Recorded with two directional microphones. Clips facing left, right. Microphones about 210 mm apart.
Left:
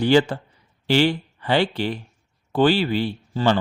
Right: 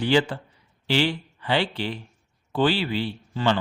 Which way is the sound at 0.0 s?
40° left (ahead or behind).